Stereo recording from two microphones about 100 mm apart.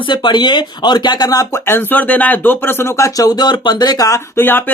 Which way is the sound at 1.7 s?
20° left (ahead or behind).